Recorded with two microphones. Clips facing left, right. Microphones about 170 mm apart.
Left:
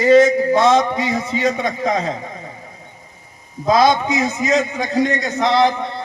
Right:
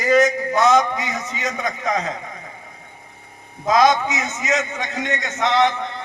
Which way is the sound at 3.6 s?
30° left (ahead or behind).